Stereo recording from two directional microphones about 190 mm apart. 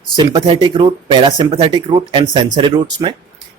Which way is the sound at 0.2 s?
25° right (ahead or behind).